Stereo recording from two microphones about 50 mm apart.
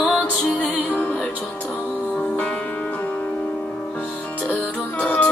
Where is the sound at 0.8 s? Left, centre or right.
Left.